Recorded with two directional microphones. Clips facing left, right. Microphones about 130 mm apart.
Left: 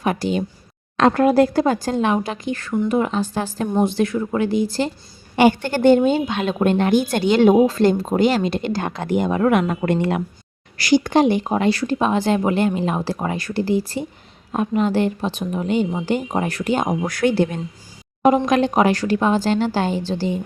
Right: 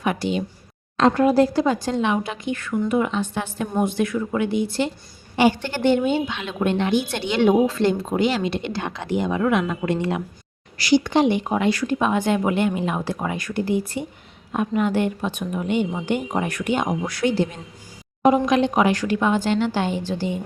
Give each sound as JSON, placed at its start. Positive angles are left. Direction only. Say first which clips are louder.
{"t": 0.0, "sound": "speech", "louder": "left 2 dB", "side_deg": 40}
{"t": 0.9, "sound": "speech", "louder": "left 2 dB", "side_deg": 65}
{"t": 5.4, "sound": "speech", "louder": "left 4 dB", "side_deg": 50}
{"t": 18.4, "sound": "speech", "louder": "left 2 dB", "side_deg": 45}